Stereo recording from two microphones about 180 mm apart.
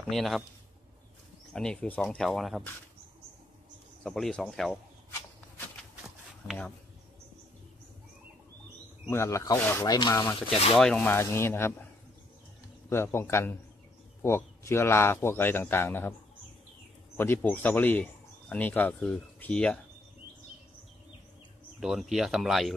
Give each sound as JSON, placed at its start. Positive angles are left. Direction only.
{"t": 0.1, "sound": "speech", "side_deg": 0}
{"t": 1.5, "sound": "speech", "side_deg": 5}
{"t": 4.0, "sound": "speech", "side_deg": 5}
{"t": 6.0, "sound": "a sound", "side_deg": 0}
{"t": 9.1, "sound": "speech", "side_deg": 15}
{"t": 10.5, "sound": "speech", "side_deg": 35}
{"t": 10.8, "sound": "speech", "side_deg": 5}
{"t": 12.9, "sound": "speech", "side_deg": 15}
{"t": 17.2, "sound": "speech", "side_deg": 10}
{"t": 21.7, "sound": "speech", "side_deg": 0}